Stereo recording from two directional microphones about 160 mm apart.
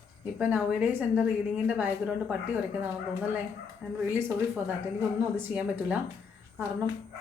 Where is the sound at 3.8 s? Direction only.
5° right (ahead or behind).